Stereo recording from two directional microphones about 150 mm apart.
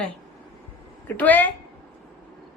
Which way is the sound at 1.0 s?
10° left (ahead or behind).